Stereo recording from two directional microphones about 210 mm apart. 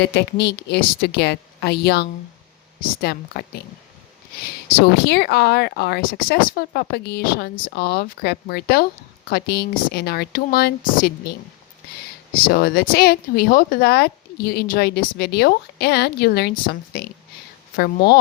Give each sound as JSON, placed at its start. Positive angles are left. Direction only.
{"t": 0.0, "sound": "speech", "side_deg": 50}
{"t": 5.0, "sound": "speech", "side_deg": 50}
{"t": 12.5, "sound": "speech", "side_deg": 50}